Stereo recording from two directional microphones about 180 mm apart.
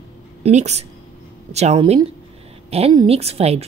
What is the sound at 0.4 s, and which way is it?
A woman's voice, 40° right (ahead or behind).